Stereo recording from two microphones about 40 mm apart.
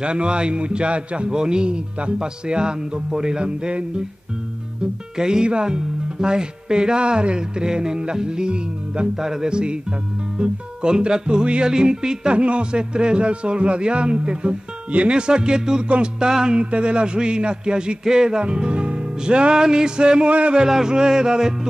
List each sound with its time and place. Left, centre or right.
0.0 s speech: right
3.4 s speech: right
5.1 s speech: centre
9.2 s music: centre
9.5 s speech: right
11.7 s music: centre
12.4 s speech: right
16.3 s music: centre
16.5 s speech: right
18.4 s music: right
20.2 s speech: right
20.5 s music: centre